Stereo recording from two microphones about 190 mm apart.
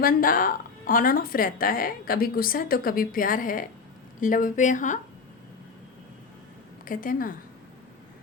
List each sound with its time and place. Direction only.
0.0 s a woman's voice: 50° left (ahead or behind)
6.8 s speech: 45° left (ahead or behind)